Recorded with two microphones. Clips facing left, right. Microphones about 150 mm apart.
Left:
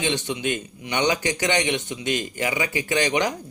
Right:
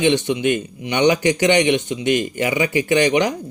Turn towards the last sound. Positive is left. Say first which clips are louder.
# right 6 dB
turn(degrees=-20)  # may be behind; listen again after turning